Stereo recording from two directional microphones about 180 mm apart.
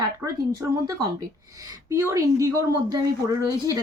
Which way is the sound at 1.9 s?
20° right (ahead or behind).